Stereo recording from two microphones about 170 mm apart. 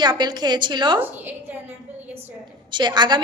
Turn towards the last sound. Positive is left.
turn(degrees=-25)  # may be behind; listen again after turning